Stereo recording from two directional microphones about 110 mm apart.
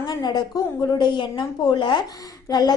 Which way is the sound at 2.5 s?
40° left (ahead or behind).